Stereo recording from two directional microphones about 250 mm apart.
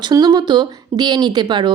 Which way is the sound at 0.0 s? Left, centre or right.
Centre.